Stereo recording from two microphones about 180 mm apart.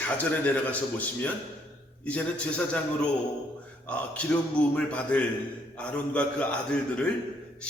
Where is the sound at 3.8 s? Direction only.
5° left (ahead or behind).